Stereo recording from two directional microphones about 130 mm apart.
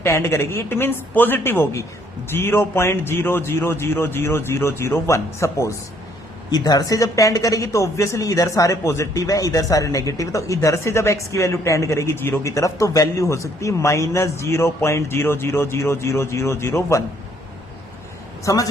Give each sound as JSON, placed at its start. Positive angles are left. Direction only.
{"t": 0.0, "sound": "speech", "side_deg": 20}
{"t": 18.4, "sound": "speech", "side_deg": 25}